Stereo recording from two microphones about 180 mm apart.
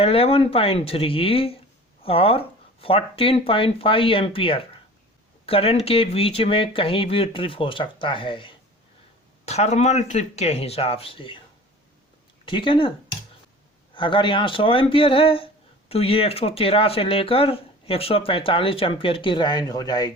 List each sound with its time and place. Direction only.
0.0 s speech: 30° left (ahead or behind)
12.5 s speech: 25° left (ahead or behind)
13.9 s speech: 25° left (ahead or behind)